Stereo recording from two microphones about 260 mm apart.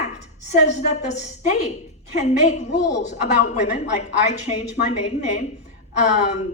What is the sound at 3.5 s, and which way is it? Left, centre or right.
A woman's voice, left.